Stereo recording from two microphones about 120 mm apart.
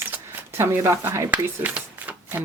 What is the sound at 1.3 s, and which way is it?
Speech, 10° right (ahead or behind).